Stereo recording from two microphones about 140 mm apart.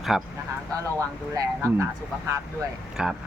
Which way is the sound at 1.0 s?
20° right (ahead or behind).